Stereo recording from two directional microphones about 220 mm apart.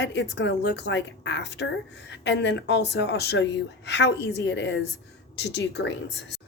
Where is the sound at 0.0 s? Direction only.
50° left (ahead or behind).